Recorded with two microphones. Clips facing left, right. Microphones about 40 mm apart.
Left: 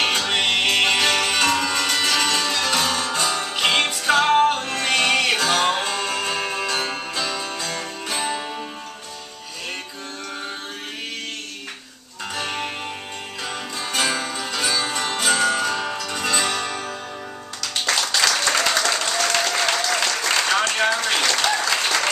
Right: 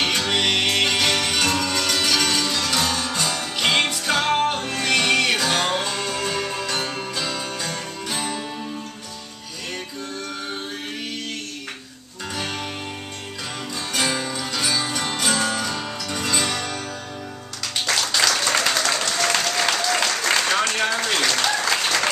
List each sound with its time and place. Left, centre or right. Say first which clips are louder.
0.0 s music: left 1 dB; centre
2.0 s music: even; centre
3.6 s music: left 1 dB; centre
7.7 s music: left 1 dB; left
12.4 s music: left 2 dB; centre
13.9 s music: left 1 dB; centre
17.8 s applause: even; centre